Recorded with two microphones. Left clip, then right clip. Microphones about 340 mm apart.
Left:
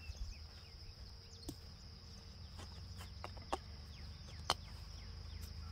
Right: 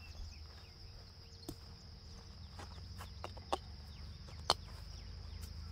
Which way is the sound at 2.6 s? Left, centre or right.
Centre.